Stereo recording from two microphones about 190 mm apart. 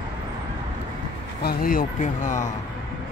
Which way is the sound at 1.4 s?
50° left (ahead or behind).